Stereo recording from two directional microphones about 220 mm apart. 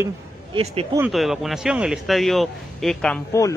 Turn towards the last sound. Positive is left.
turn(degrees=5)  # may be behind; listen again after turning